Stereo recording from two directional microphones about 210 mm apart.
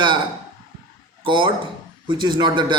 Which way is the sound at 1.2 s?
20° right (ahead or behind).